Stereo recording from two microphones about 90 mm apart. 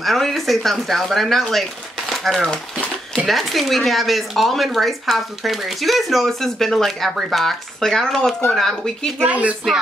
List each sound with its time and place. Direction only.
0.0 s speech: centre (ahead or behind)
9.2 s speech: 15° right (ahead or behind)